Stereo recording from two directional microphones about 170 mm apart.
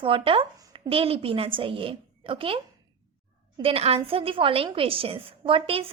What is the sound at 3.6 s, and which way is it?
Speech, 35° right (ahead or behind).